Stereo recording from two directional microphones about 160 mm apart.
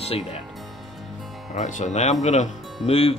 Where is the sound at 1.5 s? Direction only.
50° left (ahead or behind).